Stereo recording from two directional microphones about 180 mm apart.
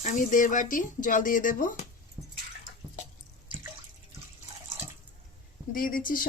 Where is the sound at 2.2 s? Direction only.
15° right (ahead or behind).